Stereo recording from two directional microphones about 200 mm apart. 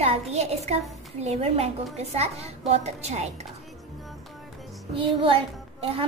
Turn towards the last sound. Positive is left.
turn(degrees=-25)  # may be behind; listen again after turning